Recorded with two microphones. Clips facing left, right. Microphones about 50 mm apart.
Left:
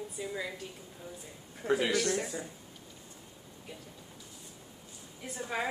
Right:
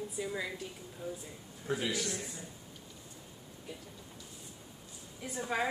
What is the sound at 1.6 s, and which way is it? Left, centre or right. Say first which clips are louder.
Speech: left 6 dB; left.